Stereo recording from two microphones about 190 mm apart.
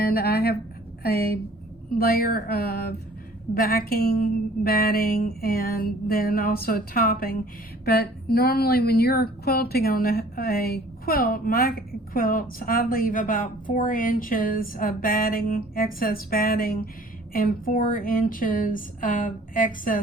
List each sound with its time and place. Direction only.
0.0 s a woman's voice: 55° left (ahead or behind)